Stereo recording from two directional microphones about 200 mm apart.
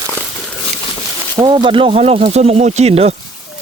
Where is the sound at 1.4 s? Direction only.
25° right (ahead or behind).